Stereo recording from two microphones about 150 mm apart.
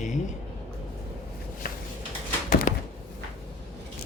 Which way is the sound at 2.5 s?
60° left (ahead or behind).